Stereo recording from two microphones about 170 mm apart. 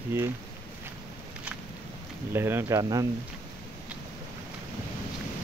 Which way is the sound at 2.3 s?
15° right (ahead or behind).